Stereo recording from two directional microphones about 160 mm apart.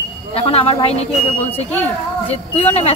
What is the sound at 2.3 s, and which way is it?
Speech, 40° left (ahead or behind).